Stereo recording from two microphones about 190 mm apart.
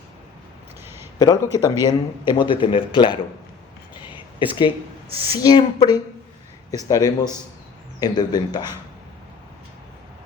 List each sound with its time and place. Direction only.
1.2 s speech: 20° left (ahead or behind)
4.4 s speech: 25° left (ahead or behind)
5.0 s speech: 30° right (ahead or behind)
5.4 s speech: 20° left (ahead or behind)